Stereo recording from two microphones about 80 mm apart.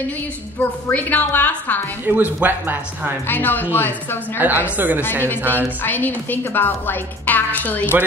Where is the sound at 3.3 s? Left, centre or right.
Left.